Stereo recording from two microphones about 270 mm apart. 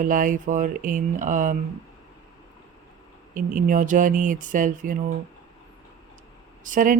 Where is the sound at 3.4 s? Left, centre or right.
Right.